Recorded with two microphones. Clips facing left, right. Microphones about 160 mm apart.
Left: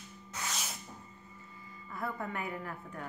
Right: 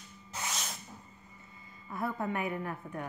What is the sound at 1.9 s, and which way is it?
A woman's voice, 20° right (ahead or behind).